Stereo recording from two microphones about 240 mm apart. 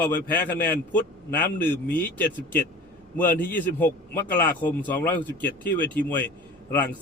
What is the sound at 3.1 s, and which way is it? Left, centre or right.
A man's voice, centre.